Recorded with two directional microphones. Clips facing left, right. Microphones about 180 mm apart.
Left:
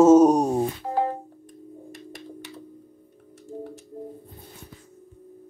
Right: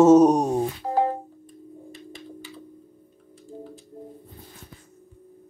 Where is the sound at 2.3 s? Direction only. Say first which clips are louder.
Left 1 dB; 75° left (ahead or behind).